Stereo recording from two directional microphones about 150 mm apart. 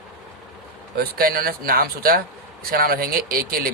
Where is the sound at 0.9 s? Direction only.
85° right.